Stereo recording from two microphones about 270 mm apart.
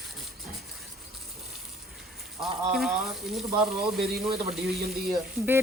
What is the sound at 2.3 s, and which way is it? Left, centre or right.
Speech, centre.